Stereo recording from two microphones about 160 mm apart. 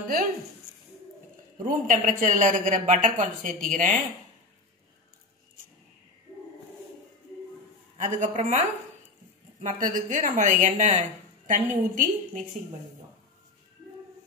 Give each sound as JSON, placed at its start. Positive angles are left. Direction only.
{"t": 1.6, "sound": "a woman's voice", "side_deg": -55}
{"t": 8.0, "sound": "a woman's voice", "side_deg": -50}